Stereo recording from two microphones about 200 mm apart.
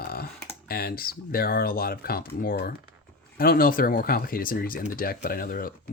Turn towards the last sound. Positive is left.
turn(degrees=45)  # may be behind; listen again after turning